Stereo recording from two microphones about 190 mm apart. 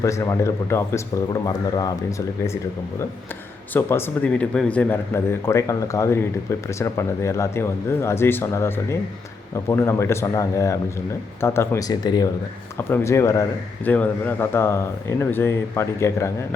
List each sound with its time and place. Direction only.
0.0 s a man's voice: 15° left (ahead or behind)
3.7 s a man's voice: 10° left (ahead or behind)